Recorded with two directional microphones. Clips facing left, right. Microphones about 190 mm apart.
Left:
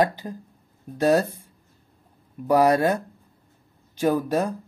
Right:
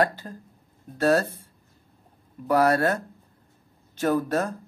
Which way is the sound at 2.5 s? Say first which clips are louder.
Left 2 dB; 15° left (ahead or behind).